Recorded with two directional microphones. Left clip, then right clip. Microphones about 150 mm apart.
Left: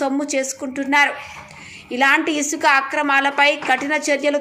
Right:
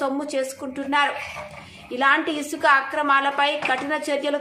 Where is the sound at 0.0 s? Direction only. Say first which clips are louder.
Left 4 dB; 20° left (ahead or behind).